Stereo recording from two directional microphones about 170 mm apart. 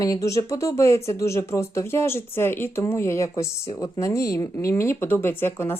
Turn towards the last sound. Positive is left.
turn(degrees=15)  # may be behind; listen again after turning